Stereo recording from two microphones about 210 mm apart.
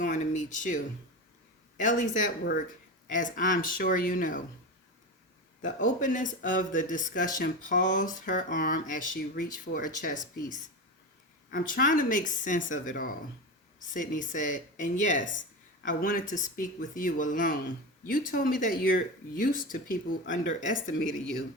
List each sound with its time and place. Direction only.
0.0 s a sound: 35° left (ahead or behind)
1.8 s speech: 35° left (ahead or behind)
5.6 s speech: 35° left (ahead or behind)